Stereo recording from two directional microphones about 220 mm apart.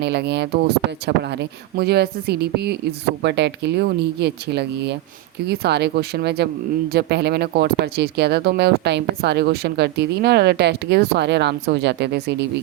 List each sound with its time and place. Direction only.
0.0 s speech: 50° right (ahead or behind)